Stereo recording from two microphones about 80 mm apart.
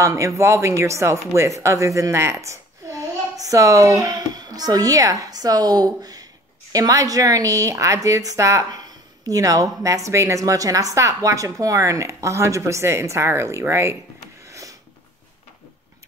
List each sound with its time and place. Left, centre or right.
0.0 s a woman's voice: right
8.6 s a woman's voice: right
14.4 s a sound: right